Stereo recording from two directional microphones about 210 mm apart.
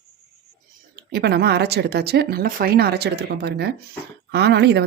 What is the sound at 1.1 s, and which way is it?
Speech, 50° right (ahead or behind).